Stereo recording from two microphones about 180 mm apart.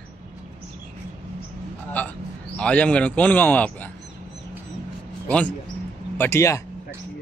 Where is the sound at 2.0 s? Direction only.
10° left (ahead or behind).